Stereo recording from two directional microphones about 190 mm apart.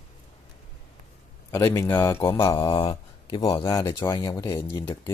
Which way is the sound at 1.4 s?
15° left (ahead or behind).